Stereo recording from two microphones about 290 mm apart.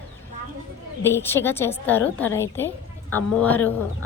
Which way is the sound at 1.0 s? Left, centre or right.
Centre.